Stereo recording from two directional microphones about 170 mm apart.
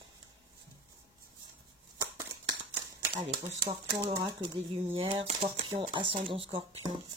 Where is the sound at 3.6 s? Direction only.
25° right (ahead or behind).